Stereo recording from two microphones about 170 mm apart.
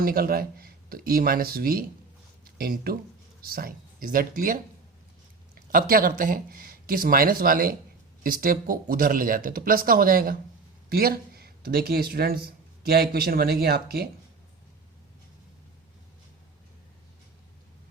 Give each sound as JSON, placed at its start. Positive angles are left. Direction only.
{"t": 0.0, "sound": "speech", "side_deg": -60}
{"t": 5.7, "sound": "speech", "side_deg": -60}